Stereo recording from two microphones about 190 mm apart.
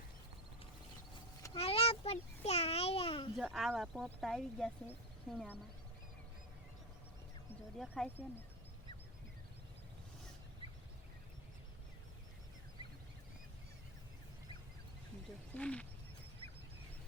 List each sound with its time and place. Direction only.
1.5 s a sound: 30° left (ahead or behind)
3.3 s speech: centre (ahead or behind)
7.8 s speech: 5° left (ahead or behind)
15.5 s speech: 5° left (ahead or behind)